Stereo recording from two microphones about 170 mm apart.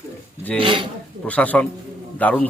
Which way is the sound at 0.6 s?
30° right (ahead or behind).